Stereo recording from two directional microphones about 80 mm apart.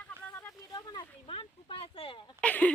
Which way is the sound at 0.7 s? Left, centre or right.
Left.